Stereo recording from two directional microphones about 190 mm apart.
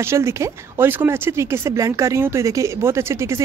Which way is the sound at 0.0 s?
15° right (ahead or behind).